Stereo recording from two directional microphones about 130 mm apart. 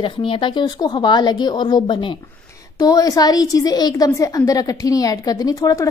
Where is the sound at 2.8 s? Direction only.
25° left (ahead or behind).